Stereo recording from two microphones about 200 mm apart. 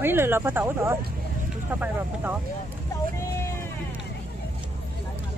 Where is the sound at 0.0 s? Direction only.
10° right (ahead or behind).